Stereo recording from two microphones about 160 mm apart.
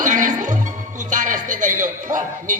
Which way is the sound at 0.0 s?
50° right (ahead or behind).